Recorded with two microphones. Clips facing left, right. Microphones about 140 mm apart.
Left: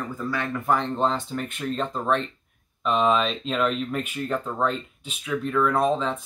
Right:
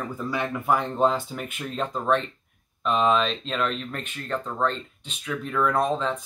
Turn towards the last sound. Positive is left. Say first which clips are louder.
# left 2 dB
turn(degrees=0)  # may be behind; listen again after turning